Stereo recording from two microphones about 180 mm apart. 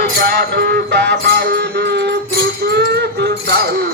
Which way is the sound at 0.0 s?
60° right (ahead or behind).